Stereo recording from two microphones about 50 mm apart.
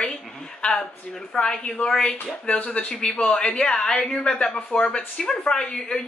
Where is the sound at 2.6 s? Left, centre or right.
Left.